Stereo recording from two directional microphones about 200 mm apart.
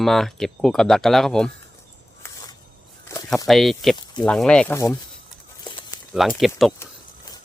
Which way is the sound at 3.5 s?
Centre (ahead or behind).